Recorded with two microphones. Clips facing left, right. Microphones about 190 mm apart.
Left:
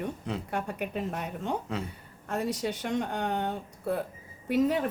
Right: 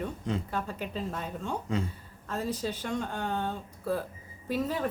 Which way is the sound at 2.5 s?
75° left (ahead or behind).